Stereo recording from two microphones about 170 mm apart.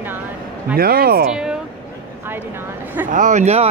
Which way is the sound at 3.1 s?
45° right (ahead or behind).